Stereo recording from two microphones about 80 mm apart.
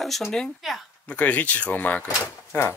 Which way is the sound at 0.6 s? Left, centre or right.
Centre.